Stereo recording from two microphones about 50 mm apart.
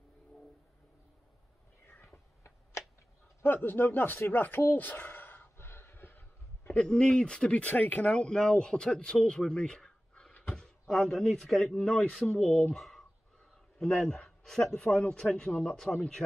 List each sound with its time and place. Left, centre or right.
1.9 s a sound: left
3.5 s sigh: left
6.7 s speech: left
7.6 s speech: left
8.1 s a man's voice: centre
10.4 s a sound: centre
11.0 s a man's voice: centre